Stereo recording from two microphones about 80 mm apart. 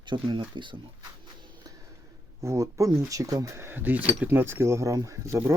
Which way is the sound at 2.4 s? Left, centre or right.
Right.